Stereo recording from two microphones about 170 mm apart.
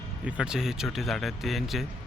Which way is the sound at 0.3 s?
5° right (ahead or behind).